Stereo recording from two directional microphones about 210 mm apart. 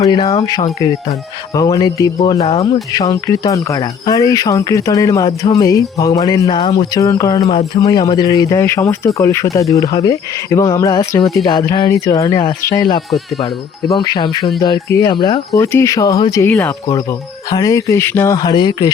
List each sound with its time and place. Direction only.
0.0 s speech: 20° left (ahead or behind)
2.4 s speech: 30° left (ahead or behind)
2.9 s speech: 15° left (ahead or behind)